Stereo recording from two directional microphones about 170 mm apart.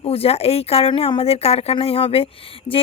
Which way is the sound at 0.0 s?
35° left (ahead or behind).